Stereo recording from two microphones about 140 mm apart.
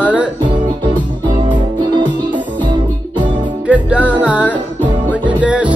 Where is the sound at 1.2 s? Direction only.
35° right (ahead or behind).